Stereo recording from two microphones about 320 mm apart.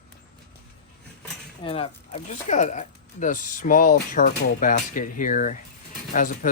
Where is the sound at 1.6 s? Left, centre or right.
Centre.